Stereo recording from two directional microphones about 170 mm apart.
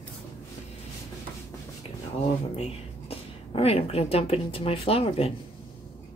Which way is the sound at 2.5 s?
35° left (ahead or behind).